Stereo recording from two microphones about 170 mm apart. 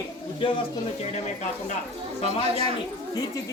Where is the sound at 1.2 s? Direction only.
45° left (ahead or behind).